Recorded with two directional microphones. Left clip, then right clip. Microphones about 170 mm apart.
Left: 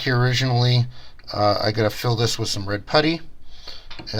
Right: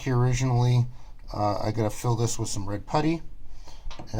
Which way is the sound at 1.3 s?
25° left (ahead or behind).